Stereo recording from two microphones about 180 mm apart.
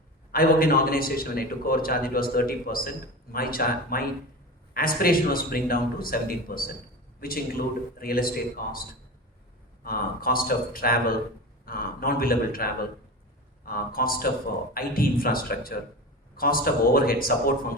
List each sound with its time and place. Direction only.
0.3 s a man's voice: 55° left (ahead or behind)
9.8 s a man's voice: 55° left (ahead or behind)